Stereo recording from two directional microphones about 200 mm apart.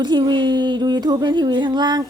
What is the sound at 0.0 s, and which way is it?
Speech, 20° right (ahead or behind).